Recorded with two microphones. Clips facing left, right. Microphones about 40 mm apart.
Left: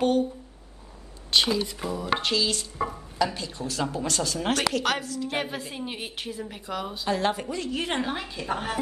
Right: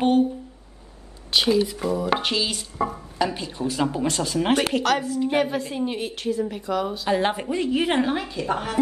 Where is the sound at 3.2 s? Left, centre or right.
Right.